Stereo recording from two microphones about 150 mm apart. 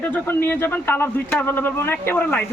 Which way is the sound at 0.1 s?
15° left (ahead or behind).